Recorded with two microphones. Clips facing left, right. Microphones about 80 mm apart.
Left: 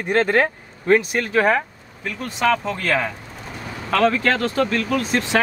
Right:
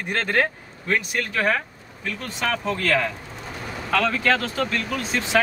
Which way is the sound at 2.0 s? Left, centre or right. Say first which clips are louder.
Left 6 dB; centre.